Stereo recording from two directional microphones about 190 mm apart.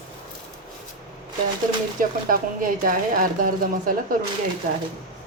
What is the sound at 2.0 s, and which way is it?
Speech, 45° right (ahead or behind).